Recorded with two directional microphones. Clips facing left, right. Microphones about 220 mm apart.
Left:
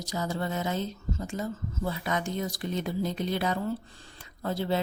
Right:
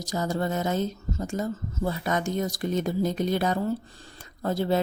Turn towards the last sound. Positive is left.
turn(degrees=-45)  # may be behind; listen again after turning